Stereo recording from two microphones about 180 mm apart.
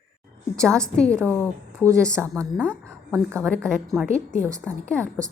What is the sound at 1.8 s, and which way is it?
Speech, 15° right (ahead or behind).